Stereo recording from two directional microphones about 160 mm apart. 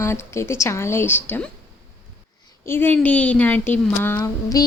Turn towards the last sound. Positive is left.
turn(degrees=20)  # may be behind; listen again after turning